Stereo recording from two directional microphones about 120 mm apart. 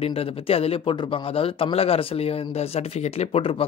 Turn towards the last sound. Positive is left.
turn(degrees=50)  # may be behind; listen again after turning